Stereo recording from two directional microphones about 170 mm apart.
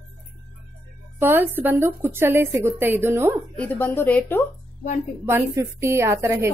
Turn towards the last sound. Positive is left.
turn(degrees=-15)  # may be behind; listen again after turning